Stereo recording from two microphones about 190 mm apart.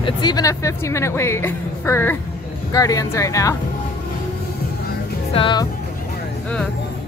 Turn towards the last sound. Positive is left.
turn(degrees=25)  # may be behind; listen again after turning